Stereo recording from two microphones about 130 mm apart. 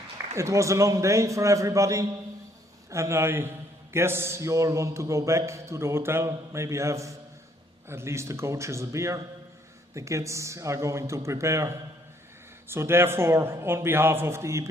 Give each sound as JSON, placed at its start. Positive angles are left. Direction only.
{"t": 0.3, "sound": "a man's voice", "side_deg": -25}